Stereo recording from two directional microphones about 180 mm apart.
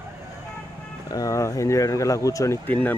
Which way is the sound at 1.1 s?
15° left (ahead or behind).